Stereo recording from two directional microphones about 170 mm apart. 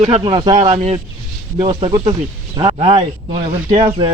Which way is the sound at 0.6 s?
40° right (ahead or behind).